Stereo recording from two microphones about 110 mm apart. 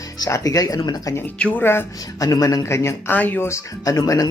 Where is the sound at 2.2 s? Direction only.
35° left (ahead or behind).